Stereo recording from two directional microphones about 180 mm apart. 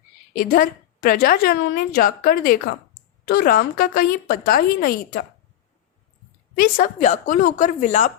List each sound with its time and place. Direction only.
0.3 s a woman's voice: 50° left (ahead or behind)
6.6 s a woman's voice: 50° left (ahead or behind)